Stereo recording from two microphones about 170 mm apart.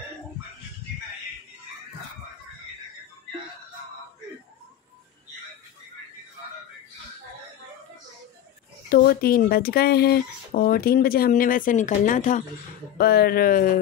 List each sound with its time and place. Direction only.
8.8 s speech: 60° left (ahead or behind)
12.9 s speech: 65° left (ahead or behind)